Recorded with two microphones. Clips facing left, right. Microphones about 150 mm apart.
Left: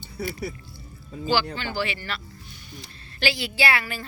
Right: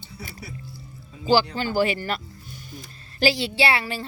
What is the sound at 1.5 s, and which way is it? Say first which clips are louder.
Speech: right 6 dB; 45° right (ahead or behind).